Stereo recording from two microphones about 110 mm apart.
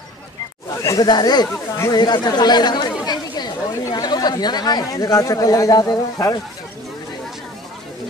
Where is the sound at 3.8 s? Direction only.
35° left (ahead or behind).